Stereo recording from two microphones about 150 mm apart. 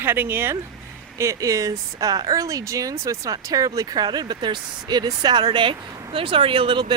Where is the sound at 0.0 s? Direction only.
15° right (ahead or behind).